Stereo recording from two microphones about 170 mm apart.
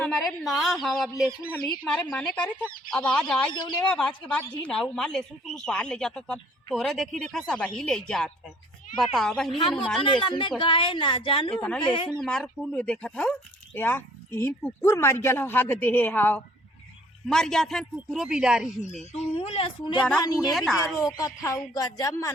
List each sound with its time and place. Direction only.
0.0 s speech: centre (ahead or behind)
3.5 s a woman's voice: 25° left (ahead or behind)
3.8 s speech: 5° left (ahead or behind)
9.5 s a woman's voice: 30° left (ahead or behind)
9.7 s speech: 5° left (ahead or behind)
10.0 s a woman's voice: 30° left (ahead or behind)
11.5 s speech: 5° left (ahead or behind)
11.8 s a woman's voice: 30° left (ahead or behind)
12.2 s speech: 5° left (ahead or behind)
19.4 s a woman's voice: 35° left (ahead or behind)
20.5 s speech: centre (ahead or behind)
20.7 s a woman's voice: 20° left (ahead or behind)